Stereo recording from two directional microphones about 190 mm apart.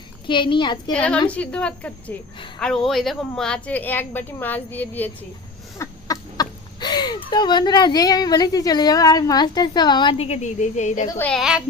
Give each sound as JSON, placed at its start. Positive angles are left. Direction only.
{"t": 0.3, "sound": "a child's voice", "side_deg": 25}
{"t": 0.9, "sound": "a woman's voice", "side_deg": 5}
{"t": 11.3, "sound": "a woman's voice", "side_deg": 0}